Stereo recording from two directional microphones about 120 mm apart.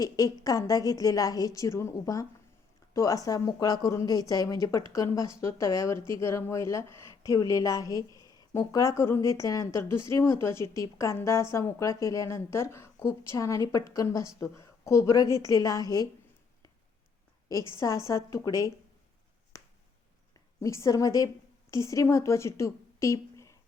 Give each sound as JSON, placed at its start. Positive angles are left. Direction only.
{"t": 0.0, "sound": "a woman's voice", "side_deg": 30}
{"t": 8.1, "sound": "a sound", "side_deg": -30}
{"t": 8.4, "sound": "a woman's voice", "side_deg": 30}
{"t": 17.7, "sound": "a woman's voice", "side_deg": 25}
{"t": 19.5, "sound": "finger snapping", "side_deg": 30}
{"t": 20.3, "sound": "a woman's voice", "side_deg": 25}